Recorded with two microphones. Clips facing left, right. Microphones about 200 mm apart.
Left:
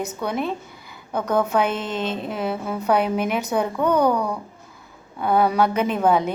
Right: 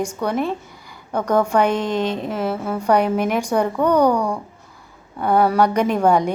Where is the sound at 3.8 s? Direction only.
10° right (ahead or behind).